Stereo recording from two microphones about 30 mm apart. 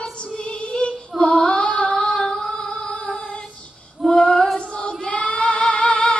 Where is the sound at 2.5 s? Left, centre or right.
Left.